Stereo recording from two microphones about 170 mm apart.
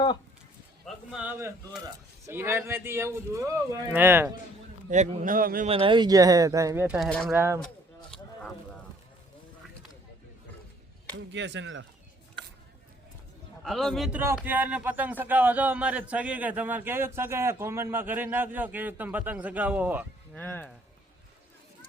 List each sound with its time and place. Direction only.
0.9 s a man's voice: 5° right (ahead or behind)
4.9 s a man's voice: 50° right (ahead or behind)
5.6 s speech: 35° right (ahead or behind)
6.8 s a man's voice: 5° right (ahead or behind)
7.1 s a man's voice: 5° left (ahead or behind)
7.3 s a man's voice: 15° right (ahead or behind)
8.1 s a sound: 10° left (ahead or behind)
11.3 s speech: 90° right
13.7 s a man's voice: centre (ahead or behind)
20.3 s speech: 10° left (ahead or behind)